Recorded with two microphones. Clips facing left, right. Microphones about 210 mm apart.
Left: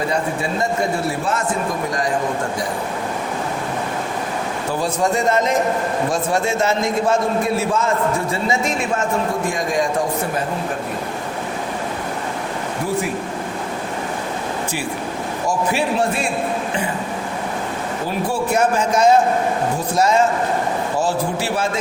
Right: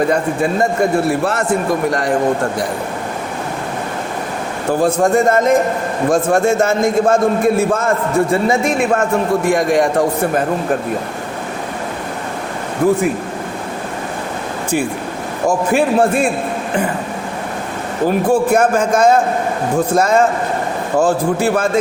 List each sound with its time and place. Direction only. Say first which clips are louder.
0.6 s a man's voice: right 5 dB; 60° right (ahead or behind)
4.7 s a man's voice: right 7 dB; 50° right (ahead or behind)
9.5 s a man's voice: right 7 dB; 65° right (ahead or behind)
15.4 s a man's voice: right 6 dB; 50° right (ahead or behind)
18.3 s a man's voice: right 4 dB; 50° right (ahead or behind)